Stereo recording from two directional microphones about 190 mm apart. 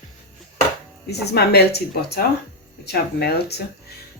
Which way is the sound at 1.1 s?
60° left (ahead or behind).